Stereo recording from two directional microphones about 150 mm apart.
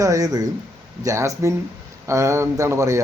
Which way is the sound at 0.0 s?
25° right (ahead or behind).